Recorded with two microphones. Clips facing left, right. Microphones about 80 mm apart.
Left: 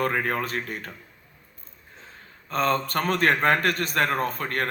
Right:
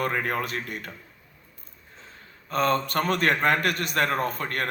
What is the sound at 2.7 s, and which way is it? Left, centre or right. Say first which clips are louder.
A man's voice: even; left.